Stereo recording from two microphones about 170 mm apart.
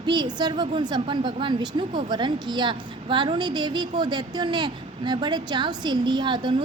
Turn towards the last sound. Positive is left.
turn(degrees=-25)  # may be behind; listen again after turning